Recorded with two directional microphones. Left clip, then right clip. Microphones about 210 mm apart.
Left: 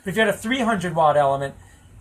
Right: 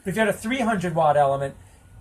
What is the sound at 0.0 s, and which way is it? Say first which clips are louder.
Speech: left 2 dB; 10° right (ahead or behind).